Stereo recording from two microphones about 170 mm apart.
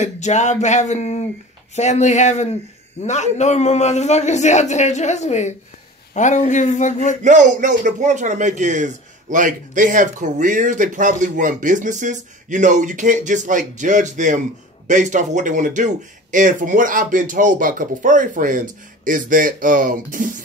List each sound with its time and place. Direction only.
0.0 s a man's voice: 45° left (ahead or behind)
7.2 s a man's voice: 50° right (ahead or behind)